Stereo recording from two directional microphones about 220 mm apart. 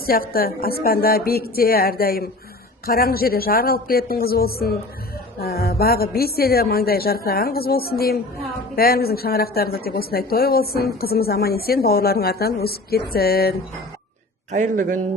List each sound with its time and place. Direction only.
0.0 s speech: 40° left (ahead or behind)
14.5 s a man's voice: 35° right (ahead or behind)